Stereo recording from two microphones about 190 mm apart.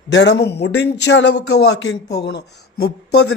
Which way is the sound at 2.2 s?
60° left (ahead or behind).